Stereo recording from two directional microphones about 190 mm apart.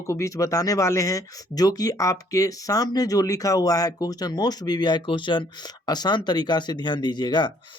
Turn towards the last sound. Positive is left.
turn(degrees=25)  # may be behind; listen again after turning